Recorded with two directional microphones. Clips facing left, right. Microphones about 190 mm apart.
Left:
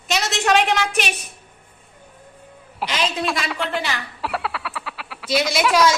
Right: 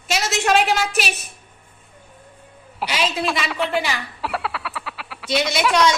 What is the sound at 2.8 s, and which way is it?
A woman's voice, 5° right (ahead or behind).